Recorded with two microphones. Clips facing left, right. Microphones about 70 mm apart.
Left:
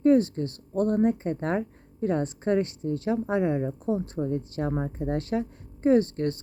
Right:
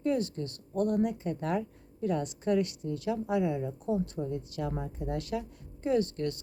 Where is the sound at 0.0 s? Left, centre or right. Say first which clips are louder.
Left 9 dB; left.